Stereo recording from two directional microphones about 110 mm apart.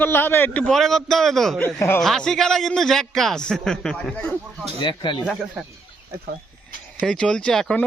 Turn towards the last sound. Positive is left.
turn(degrees=5)  # may be behind; listen again after turning